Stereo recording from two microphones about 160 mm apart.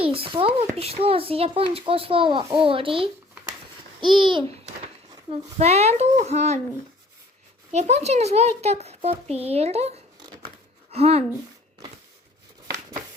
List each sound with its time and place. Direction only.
0.0 s a child's voice: 35° right (ahead or behind)
7.7 s a child's voice: 45° right (ahead or behind)
10.2 s a sound: 30° right (ahead or behind)
10.9 s a child's voice: 40° right (ahead or behind)